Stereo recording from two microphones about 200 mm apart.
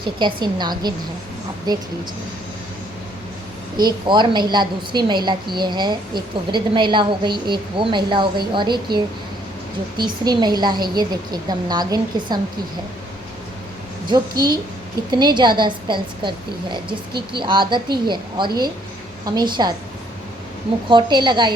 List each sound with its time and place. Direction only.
0.0 s a woman's voice: 25° right (ahead or behind)
3.8 s a woman's voice: 20° right (ahead or behind)
10.0 s a woman's voice: 20° right (ahead or behind)
14.1 s a woman's voice: 20° right (ahead or behind)
20.9 s a woman's voice: 20° right (ahead or behind)